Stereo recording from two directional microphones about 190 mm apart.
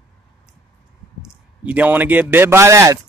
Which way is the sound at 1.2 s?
10° right (ahead or behind).